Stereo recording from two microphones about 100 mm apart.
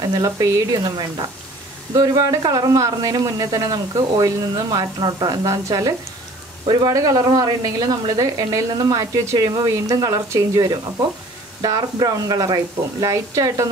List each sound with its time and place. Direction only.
0.0 s a man's voice: 35° right (ahead or behind)
6.6 s a man's voice: 45° right (ahead or behind)